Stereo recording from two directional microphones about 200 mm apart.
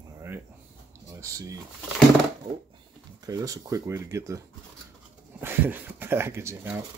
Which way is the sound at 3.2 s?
15° right (ahead or behind).